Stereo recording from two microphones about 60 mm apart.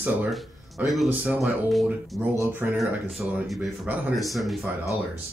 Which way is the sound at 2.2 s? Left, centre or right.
Centre.